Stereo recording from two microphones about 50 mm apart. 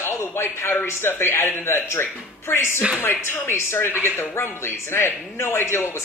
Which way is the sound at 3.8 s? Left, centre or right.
Left.